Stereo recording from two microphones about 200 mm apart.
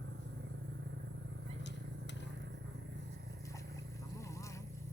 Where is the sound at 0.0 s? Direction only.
60° right (ahead or behind).